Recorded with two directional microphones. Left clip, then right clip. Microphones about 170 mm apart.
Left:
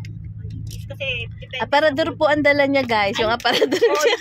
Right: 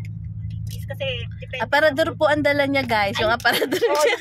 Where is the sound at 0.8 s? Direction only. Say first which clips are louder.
Left 2 dB; 5° right (ahead or behind).